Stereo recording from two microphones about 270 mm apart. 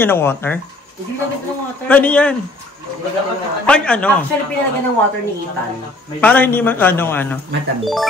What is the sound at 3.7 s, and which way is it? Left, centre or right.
Speech, centre.